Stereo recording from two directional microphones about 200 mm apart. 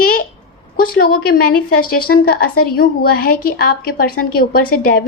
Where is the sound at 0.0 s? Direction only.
45° left (ahead or behind).